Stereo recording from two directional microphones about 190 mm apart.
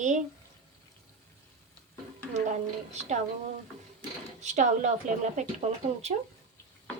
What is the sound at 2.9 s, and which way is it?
Speech, 35° right (ahead or behind).